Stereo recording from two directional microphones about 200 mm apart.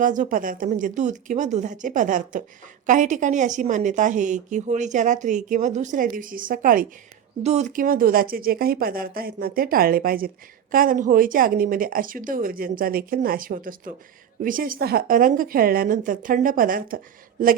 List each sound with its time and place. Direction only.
0.0 s a woman's voice: 40° right (ahead or behind)